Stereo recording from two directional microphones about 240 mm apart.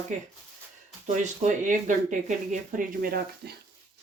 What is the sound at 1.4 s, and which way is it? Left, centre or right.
Speech, right.